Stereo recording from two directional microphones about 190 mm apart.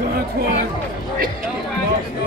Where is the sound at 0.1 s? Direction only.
50° right (ahead or behind).